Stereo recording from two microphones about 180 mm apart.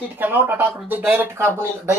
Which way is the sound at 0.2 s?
10° right (ahead or behind).